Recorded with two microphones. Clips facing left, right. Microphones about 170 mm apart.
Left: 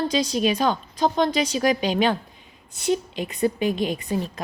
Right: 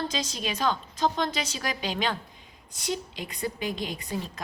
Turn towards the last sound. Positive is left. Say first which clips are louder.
# left 8 dB
turn(degrees=20)  # may be behind; listen again after turning